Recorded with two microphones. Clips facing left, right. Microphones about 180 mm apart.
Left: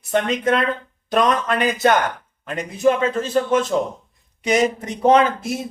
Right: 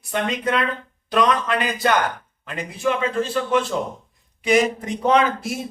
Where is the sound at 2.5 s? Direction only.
40° left (ahead or behind).